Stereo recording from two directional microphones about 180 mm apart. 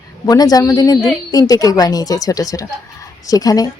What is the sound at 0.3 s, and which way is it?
A woman's voice, 20° left (ahead or behind).